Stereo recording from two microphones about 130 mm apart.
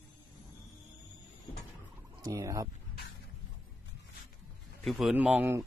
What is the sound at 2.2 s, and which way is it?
Fowl, 25° right (ahead or behind).